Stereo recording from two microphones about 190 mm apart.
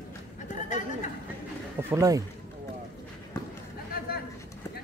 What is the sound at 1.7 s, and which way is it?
Speech, 15° right (ahead or behind).